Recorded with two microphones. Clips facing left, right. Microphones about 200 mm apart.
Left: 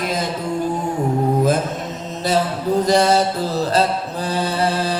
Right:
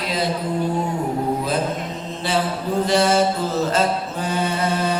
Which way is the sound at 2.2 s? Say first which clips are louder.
Left 4 dB; 40° left (ahead or behind).